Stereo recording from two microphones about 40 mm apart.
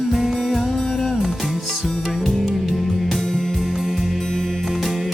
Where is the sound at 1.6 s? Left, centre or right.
Centre.